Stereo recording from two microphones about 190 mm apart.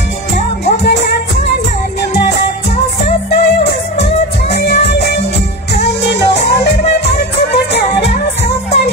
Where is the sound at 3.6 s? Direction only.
60° left (ahead or behind).